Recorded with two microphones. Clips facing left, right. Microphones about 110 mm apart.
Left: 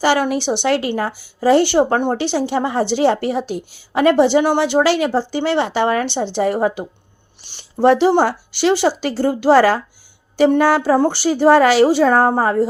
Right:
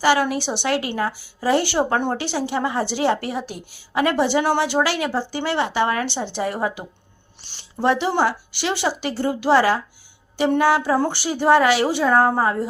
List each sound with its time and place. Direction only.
0.0 s a woman's voice: 25° left (ahead or behind)
7.8 s a woman's voice: 35° left (ahead or behind)